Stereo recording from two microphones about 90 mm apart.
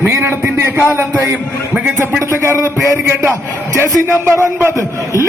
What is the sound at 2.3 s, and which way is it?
A man's voice, 35° right (ahead or behind).